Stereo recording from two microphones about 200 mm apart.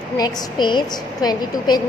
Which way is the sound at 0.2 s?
20° left (ahead or behind).